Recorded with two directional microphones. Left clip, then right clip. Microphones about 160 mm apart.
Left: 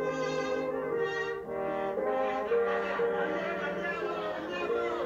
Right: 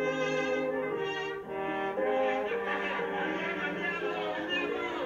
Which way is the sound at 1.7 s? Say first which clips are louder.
Right 2 dB; 10° right (ahead or behind).